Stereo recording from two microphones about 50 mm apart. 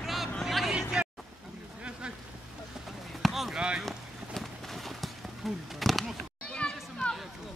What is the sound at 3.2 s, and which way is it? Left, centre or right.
Basketball bounce, centre.